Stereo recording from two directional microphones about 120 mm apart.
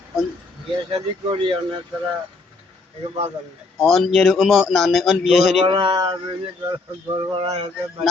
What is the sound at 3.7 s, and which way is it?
Speech, centre (ahead or behind).